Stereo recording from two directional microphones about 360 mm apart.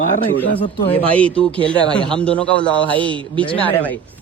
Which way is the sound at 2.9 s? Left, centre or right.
Centre.